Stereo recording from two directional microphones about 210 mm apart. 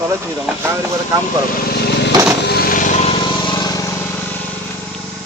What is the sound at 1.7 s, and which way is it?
Vehicle, 50° left (ahead or behind).